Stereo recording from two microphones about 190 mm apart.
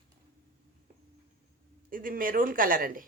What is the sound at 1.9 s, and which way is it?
Speech, 45° right (ahead or behind).